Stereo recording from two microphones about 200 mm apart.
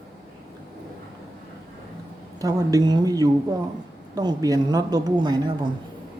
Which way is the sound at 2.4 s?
20° right (ahead or behind).